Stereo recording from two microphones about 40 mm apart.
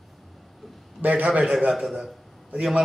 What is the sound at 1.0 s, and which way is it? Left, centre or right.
Speech, right.